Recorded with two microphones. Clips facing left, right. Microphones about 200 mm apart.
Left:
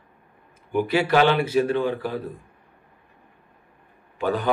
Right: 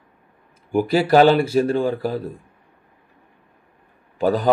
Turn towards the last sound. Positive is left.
turn(degrees=-35)  # may be behind; listen again after turning